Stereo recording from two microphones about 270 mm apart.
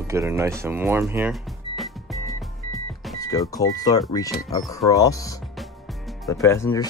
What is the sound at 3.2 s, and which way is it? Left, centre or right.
Speech, centre.